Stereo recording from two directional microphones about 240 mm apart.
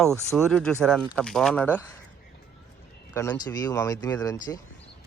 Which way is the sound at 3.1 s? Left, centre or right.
Centre.